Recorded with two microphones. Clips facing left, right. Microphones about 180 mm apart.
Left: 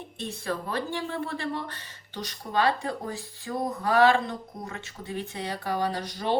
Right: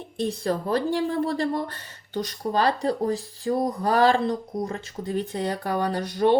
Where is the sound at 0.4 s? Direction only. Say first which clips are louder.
Right 5 dB; 40° right (ahead or behind).